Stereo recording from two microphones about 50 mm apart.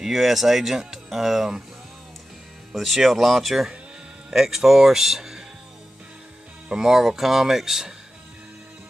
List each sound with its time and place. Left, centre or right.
0.0 s speech: centre
2.7 s speech: centre
6.7 s speech: centre